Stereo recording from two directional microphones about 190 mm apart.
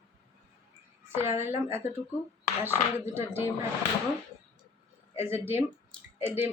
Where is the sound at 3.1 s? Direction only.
10° right (ahead or behind).